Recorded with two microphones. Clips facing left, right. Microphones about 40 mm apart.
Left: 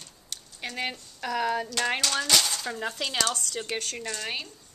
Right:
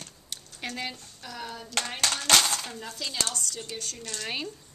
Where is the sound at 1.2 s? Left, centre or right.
Left.